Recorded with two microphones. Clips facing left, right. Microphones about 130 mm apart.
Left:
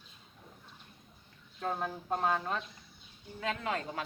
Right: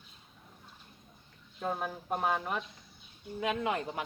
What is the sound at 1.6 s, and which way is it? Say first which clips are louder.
Speech: even; 10° right (ahead or behind).